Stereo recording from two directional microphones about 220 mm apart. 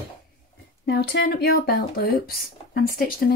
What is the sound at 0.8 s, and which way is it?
Speech, 50° left (ahead or behind).